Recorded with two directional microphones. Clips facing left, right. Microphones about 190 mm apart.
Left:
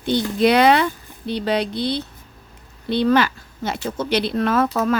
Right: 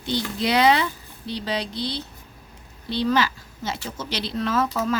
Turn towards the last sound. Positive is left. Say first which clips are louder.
# left 5 dB
turn(degrees=60)  # may be behind; listen again after turning